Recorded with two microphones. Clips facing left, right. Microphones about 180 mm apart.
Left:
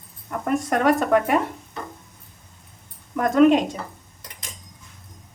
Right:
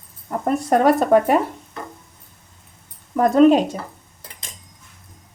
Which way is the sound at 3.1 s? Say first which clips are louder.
Right 3 dB; 30° right (ahead or behind).